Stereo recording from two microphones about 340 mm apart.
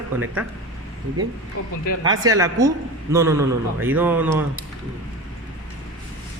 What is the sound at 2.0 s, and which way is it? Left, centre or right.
Speech, centre.